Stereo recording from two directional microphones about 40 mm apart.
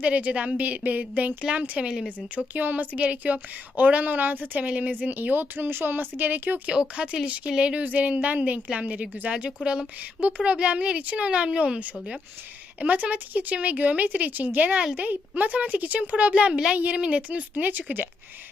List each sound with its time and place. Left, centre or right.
0.0 s speech: right
1.8 s speech: centre
2.5 s a woman's voice: right
3.0 s a woman's voice: right
6.7 s speech: right
7.8 s speech: right
12.8 s speech: right
16.5 s speech: centre
16.7 s speech: right
17.5 s a woman's voice: right